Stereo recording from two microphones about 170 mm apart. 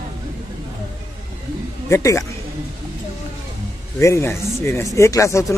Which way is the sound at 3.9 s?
15° left (ahead or behind).